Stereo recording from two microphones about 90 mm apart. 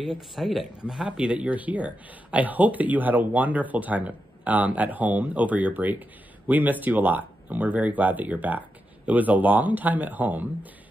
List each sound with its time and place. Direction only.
0.0 s speech: centre (ahead or behind); by 10.7 s 20° right (ahead or behind)